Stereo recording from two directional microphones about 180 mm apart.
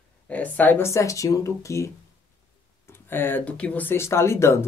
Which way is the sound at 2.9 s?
10° left (ahead or behind).